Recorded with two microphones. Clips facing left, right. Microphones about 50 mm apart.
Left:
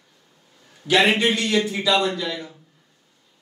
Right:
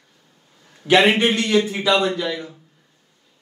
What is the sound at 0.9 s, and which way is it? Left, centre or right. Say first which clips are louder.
A man's voice: right 3 dB; right.